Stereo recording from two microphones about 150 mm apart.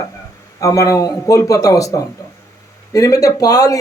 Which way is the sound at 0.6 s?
20° left (ahead or behind).